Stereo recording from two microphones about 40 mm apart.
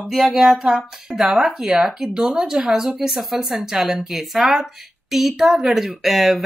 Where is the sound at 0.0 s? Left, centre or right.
Centre.